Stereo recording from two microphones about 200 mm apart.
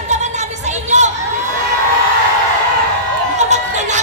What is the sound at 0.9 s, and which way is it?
Crowd, 35° right (ahead or behind).